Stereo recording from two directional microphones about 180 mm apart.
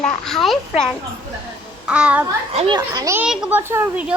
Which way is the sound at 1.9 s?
5° right (ahead or behind).